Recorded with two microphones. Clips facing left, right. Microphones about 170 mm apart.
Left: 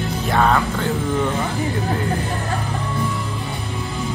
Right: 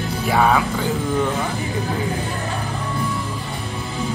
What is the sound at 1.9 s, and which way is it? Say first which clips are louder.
Music: left 1 dB; centre (ahead or behind).